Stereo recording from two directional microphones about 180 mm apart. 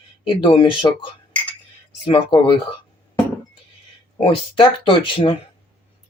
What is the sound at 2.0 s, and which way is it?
Speech, 30° left (ahead or behind).